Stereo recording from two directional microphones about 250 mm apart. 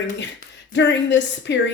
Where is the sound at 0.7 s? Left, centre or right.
Left.